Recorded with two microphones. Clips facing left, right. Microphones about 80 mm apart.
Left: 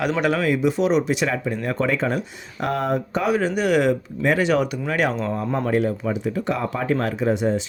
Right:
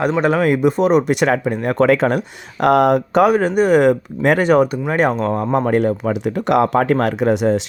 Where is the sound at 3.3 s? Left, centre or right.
Right.